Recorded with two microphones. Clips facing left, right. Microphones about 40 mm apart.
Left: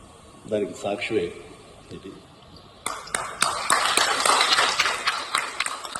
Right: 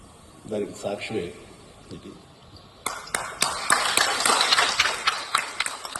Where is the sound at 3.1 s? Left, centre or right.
Left.